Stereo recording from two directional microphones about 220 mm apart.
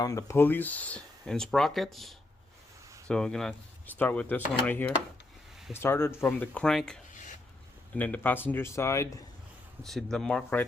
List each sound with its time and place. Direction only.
0.0 s speech: 15° left (ahead or behind)
7.1 s a sound: 35° left (ahead or behind)
7.9 s speech: 5° left (ahead or behind)
9.8 s speech: centre (ahead or behind)